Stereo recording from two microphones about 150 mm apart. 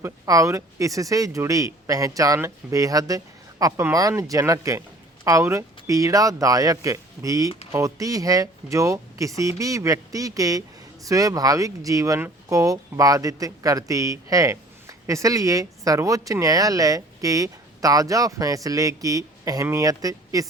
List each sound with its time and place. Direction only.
0.0 s speech: 20° right (ahead or behind)